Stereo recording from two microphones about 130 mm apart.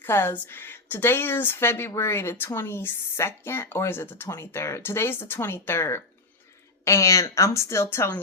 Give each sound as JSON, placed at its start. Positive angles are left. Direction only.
{"t": 0.0, "sound": "a woman's voice", "side_deg": 15}